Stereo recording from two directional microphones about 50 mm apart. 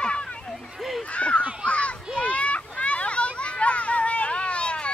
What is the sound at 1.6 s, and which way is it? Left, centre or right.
Children playing, left.